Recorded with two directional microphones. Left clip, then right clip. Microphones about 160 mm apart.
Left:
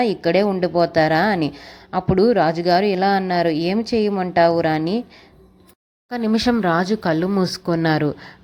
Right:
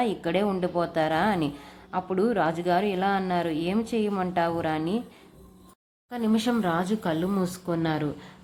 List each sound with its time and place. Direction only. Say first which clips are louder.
0.0 s a woman's voice: left 8 dB; 35° left (ahead or behind)
6.1 s a woman's voice: left 7 dB; 35° left (ahead or behind)